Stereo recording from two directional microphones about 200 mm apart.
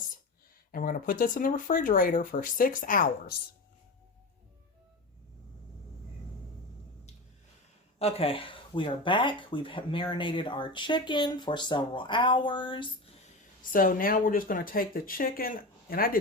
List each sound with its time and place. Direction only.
0.7 s speech: 45° left (ahead or behind)
7.9 s speech: 30° left (ahead or behind)
13.6 s speech: 45° left (ahead or behind)